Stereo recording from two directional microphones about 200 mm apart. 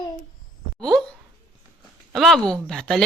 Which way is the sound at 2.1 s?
Centre (ahead or behind).